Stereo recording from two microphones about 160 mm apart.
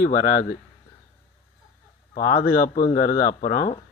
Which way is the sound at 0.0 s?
60° left (ahead or behind).